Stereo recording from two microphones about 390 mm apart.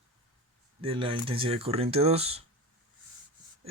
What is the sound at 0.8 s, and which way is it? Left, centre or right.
Speech, centre.